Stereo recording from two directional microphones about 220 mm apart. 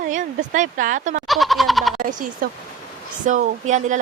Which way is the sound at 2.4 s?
40° right (ahead or behind).